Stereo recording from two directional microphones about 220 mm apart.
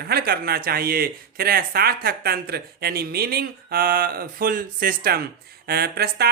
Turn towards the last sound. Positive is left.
turn(degrees=-45)  # may be behind; listen again after turning